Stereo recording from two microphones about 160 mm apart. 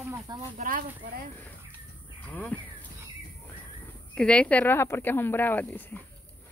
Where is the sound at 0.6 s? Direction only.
55° right (ahead or behind).